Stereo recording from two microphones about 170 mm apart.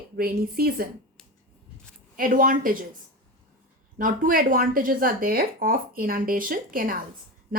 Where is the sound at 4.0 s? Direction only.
55° right (ahead or behind).